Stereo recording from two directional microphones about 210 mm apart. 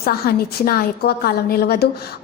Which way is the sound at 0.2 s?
45° left (ahead or behind).